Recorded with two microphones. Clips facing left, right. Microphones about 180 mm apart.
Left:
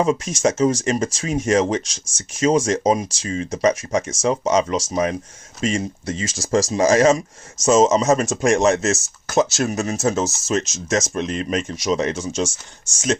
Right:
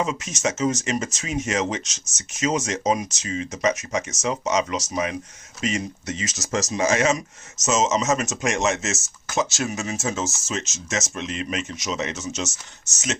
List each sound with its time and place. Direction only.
0.0 s speech: 40° left (ahead or behind)